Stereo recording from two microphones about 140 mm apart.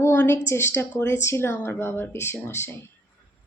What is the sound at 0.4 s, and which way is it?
Speech, 20° left (ahead or behind).